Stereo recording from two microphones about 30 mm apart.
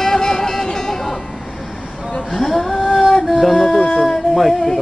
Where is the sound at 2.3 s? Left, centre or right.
Centre.